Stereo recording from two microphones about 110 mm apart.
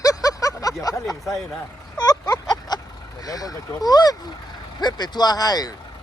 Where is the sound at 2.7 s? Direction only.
40° left (ahead or behind).